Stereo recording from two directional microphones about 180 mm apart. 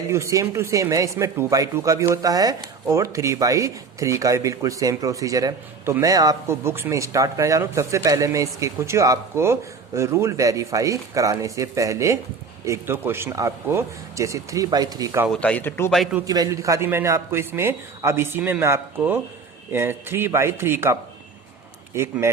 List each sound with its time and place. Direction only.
0.1 s speech: 15° right (ahead or behind)
15.3 s speech: 5° left (ahead or behind)
16.2 s speech: 20° right (ahead or behind)